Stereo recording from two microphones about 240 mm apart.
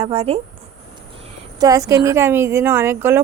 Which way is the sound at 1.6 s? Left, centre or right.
Centre.